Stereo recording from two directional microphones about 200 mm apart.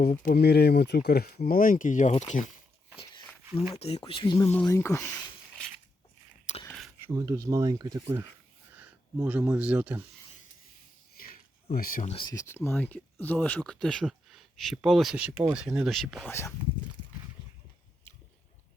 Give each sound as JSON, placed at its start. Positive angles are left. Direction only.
{"t": 0.0, "sound": "speech", "side_deg": 45}
{"t": 3.8, "sound": "speech", "side_deg": 30}
{"t": 4.4, "sound": "speech", "side_deg": 10}
{"t": 6.5, "sound": "a sound", "side_deg": 35}
{"t": 7.2, "sound": "speech", "side_deg": -15}
{"t": 11.1, "sound": "a sound", "side_deg": 45}
{"t": 12.1, "sound": "speech", "side_deg": 20}